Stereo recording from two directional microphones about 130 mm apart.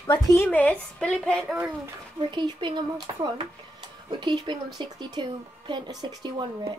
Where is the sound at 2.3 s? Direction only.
35° right (ahead or behind).